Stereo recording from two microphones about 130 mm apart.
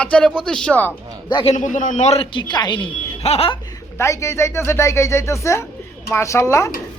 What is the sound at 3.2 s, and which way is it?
Speech, 50° left (ahead or behind).